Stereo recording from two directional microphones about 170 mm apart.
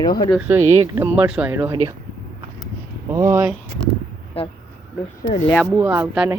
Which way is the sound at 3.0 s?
15° right (ahead or behind).